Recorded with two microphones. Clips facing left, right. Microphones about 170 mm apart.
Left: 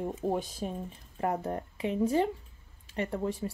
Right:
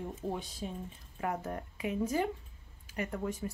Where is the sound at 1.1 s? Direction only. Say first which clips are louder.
Left 5 dB; 35° left (ahead or behind).